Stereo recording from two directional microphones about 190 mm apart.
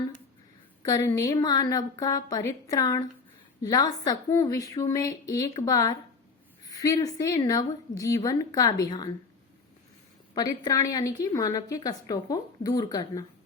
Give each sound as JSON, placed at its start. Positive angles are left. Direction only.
{"t": 0.9, "sound": "a woman's voice", "side_deg": 20}
{"t": 10.3, "sound": "a woman's voice", "side_deg": 20}